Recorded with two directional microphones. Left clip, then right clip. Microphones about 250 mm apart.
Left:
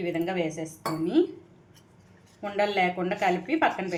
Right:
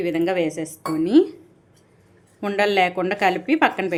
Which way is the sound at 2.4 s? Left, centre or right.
Right.